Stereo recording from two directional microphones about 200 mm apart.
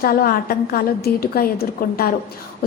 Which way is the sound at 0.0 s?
45° left (ahead or behind).